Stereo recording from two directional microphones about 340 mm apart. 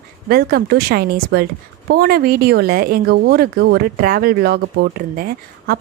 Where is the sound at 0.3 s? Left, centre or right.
Right.